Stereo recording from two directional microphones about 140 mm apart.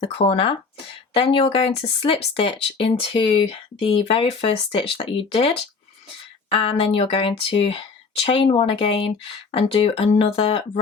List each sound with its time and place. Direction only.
0.0 s speech: 40° left (ahead or behind)